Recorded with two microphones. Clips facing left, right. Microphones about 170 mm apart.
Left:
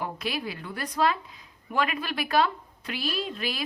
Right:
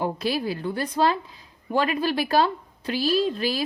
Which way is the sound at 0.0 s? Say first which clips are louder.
Right 6 dB; 35° right (ahead or behind).